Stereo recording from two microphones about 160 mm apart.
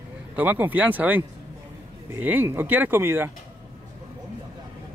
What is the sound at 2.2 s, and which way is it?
Speech, 10° right (ahead or behind).